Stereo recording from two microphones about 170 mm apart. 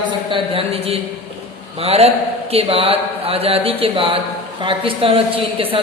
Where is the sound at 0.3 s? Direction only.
35° right (ahead or behind).